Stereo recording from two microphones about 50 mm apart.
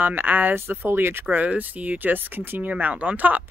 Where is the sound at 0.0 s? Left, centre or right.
Right.